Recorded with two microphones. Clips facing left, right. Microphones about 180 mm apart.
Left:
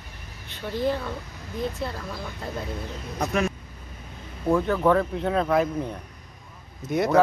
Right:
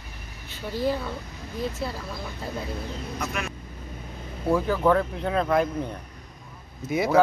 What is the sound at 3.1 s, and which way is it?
Speech, 35° left (ahead or behind).